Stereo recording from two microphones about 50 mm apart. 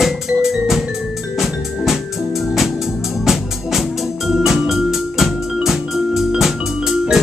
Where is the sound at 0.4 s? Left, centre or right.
Centre.